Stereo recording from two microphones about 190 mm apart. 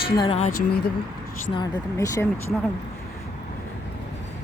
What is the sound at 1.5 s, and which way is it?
Speech, 20° left (ahead or behind).